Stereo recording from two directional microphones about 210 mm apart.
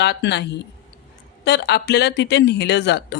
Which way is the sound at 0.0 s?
55° left (ahead or behind).